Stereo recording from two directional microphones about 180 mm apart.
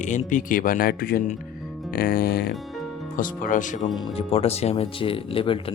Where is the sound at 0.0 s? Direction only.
45° left (ahead or behind).